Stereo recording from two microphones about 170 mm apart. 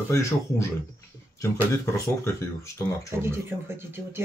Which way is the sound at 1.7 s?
15° left (ahead or behind).